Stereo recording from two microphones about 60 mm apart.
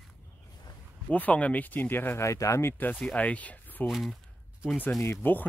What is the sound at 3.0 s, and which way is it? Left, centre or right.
Speech, left.